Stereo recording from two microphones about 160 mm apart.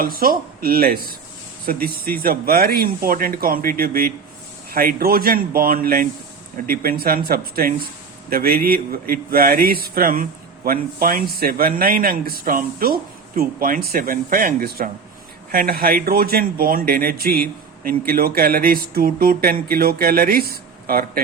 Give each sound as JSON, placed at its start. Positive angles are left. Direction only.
{"t": 0.0, "sound": "a man's voice", "side_deg": -65}